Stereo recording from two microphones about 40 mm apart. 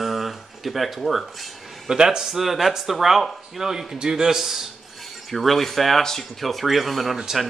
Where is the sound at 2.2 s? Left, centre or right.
Centre.